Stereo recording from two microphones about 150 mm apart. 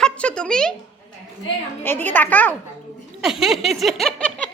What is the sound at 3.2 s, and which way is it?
Speech, centre (ahead or behind).